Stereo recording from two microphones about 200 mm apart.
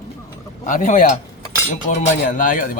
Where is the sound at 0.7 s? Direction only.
40° left (ahead or behind).